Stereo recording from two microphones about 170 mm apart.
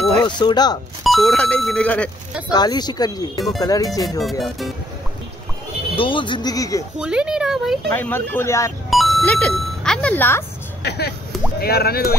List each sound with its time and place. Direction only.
0.2 s speech: 25° left (ahead or behind)
1.0 s speech: centre (ahead or behind)
2.5 s speech: 25° left (ahead or behind)
3.3 s speech: centre (ahead or behind)
3.6 s speech: 20° left (ahead or behind)
4.2 s speech: centre (ahead or behind)
5.9 s speech: 30° left (ahead or behind)
7.0 s speech: 5° right (ahead or behind)
7.9 s speech: 10° left (ahead or behind)
8.9 s speech: centre (ahead or behind)
10.8 s speech: 75° left (ahead or behind)